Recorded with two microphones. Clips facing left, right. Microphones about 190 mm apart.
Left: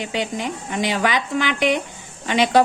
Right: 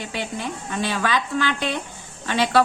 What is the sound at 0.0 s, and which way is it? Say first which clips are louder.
A woman's voice: left 4 dB; 15° left (ahead or behind).